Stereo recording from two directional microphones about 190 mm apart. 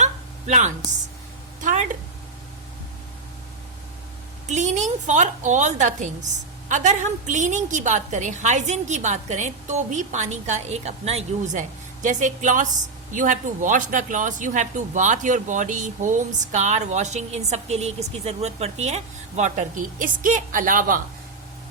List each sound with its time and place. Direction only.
0.0 s a sound: 40° right (ahead or behind)
1.6 s a woman's voice: 40° right (ahead or behind)
4.4 s a woman's voice: 40° right (ahead or behind)